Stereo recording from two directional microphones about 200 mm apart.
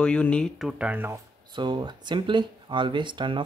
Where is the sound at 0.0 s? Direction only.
5° left (ahead or behind).